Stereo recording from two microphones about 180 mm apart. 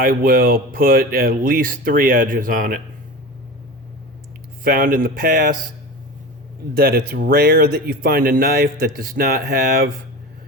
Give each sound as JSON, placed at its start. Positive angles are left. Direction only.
{"t": 0.0, "sound": "speech", "side_deg": -50}
{"t": 4.6, "sound": "speech", "side_deg": -55}
{"t": 6.7, "sound": "speech", "side_deg": -60}